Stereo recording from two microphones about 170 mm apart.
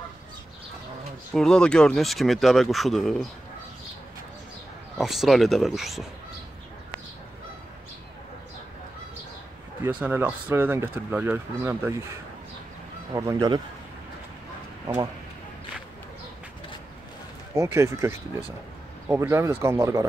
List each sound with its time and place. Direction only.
1.3 s speech: 5° left (ahead or behind)
4.9 s speech: centre (ahead or behind)
9.8 s speech: 10° right (ahead or behind)
13.1 s speech: 20° right (ahead or behind)
17.6 s speech: 15° right (ahead or behind)